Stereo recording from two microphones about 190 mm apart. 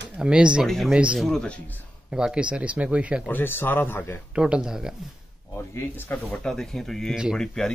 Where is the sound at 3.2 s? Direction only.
10° left (ahead or behind).